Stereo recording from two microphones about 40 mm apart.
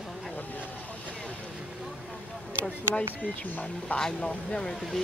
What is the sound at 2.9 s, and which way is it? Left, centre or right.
Speech, left.